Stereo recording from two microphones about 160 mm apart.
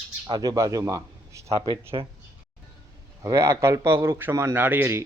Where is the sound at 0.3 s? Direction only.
25° right (ahead or behind).